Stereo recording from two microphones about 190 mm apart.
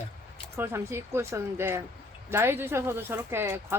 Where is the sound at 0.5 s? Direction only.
10° right (ahead or behind).